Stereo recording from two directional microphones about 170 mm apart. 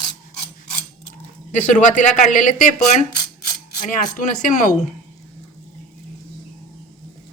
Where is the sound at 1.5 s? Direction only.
45° left (ahead or behind).